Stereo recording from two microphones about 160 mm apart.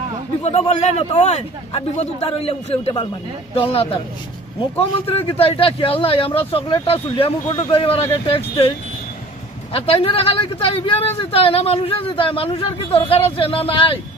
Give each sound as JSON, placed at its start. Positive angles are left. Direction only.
{"t": 0.4, "sound": "speech", "side_deg": 40}
{"t": 9.7, "sound": "speech", "side_deg": 35}